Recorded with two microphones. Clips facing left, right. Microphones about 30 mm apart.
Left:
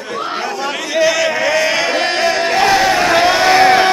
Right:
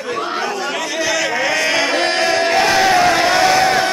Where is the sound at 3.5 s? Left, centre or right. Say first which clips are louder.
Left 4 dB; left.